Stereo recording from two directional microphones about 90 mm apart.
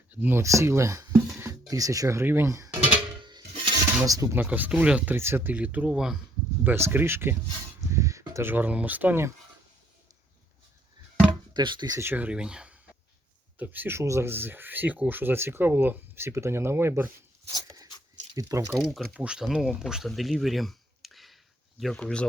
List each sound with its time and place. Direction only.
0.1 s speech: 20° right (ahead or behind)
0.4 s speech: 30° right (ahead or behind)
2.6 s music: 15° right (ahead or behind)
3.2 s a sound: 60° right (ahead or behind); by 4.4 s 40° right (ahead or behind)
4.4 s speech: 20° right (ahead or behind)
5.1 s speech: 25° right (ahead or behind); by 6.1 s 10° right (ahead or behind)
6.7 s speech: 25° right (ahead or behind)
11.5 s speech: 55° right (ahead or behind)
11.9 s speech: 20° right (ahead or behind)
13.6 s speech: 25° right (ahead or behind)
18.3 s speech: 35° right (ahead or behind)
18.7 s speech: 5° right (ahead or behind)
22.0 s speech: 10° left (ahead or behind)